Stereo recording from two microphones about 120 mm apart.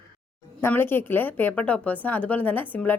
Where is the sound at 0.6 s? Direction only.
20° left (ahead or behind).